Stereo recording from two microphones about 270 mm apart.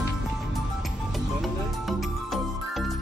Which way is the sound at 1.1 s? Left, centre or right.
Centre.